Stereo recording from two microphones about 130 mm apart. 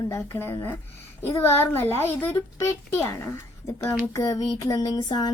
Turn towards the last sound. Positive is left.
turn(degrees=35)  # may be behind; listen again after turning